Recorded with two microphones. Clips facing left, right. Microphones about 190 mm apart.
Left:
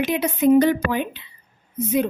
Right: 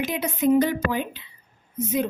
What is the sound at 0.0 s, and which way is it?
A woman's voice, 70° left (ahead or behind).